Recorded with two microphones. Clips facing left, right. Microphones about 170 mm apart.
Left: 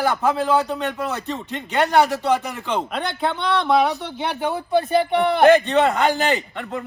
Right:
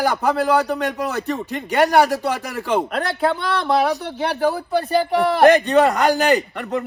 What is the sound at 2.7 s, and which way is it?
Speech, 5° right (ahead or behind).